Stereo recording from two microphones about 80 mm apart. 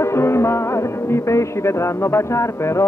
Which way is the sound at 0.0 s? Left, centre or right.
Left.